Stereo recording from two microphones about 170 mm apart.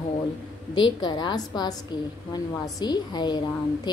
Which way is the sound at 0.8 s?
25° left (ahead or behind).